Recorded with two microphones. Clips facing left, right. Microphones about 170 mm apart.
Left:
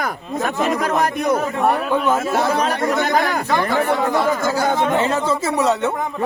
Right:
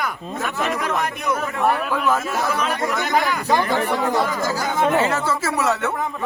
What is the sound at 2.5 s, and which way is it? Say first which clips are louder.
Speech: left 4 dB; 35° left (ahead or behind).